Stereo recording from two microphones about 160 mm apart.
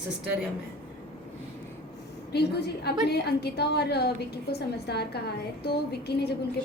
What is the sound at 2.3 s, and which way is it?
A woman's voice, 90° left.